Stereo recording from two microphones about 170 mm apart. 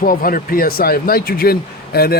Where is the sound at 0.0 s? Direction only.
60° left (ahead or behind).